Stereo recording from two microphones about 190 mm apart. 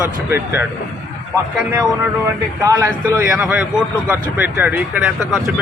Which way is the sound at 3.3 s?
5° right (ahead or behind).